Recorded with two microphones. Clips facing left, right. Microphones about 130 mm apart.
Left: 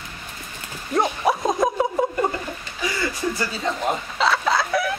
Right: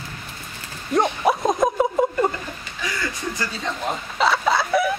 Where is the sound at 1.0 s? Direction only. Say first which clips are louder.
Right 1 dB; centre (ahead or behind).